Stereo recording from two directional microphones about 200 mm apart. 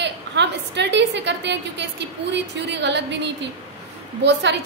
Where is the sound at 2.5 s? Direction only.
60° right (ahead or behind).